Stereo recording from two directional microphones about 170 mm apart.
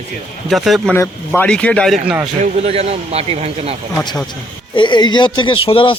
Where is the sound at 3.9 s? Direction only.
25° left (ahead or behind).